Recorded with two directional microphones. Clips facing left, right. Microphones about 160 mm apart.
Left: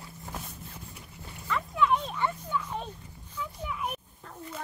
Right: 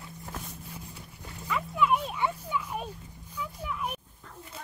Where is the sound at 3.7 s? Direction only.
Centre (ahead or behind).